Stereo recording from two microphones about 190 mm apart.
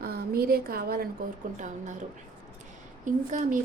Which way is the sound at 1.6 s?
40° right (ahead or behind).